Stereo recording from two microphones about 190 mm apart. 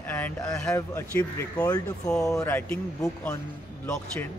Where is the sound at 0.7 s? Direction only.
15° left (ahead or behind).